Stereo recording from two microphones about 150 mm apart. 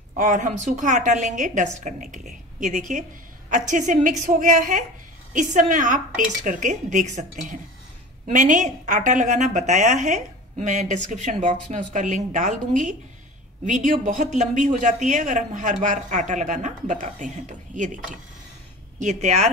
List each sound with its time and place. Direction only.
0.2 s a woman's voice: 55° right (ahead or behind)
18.9 s speech: 50° right (ahead or behind)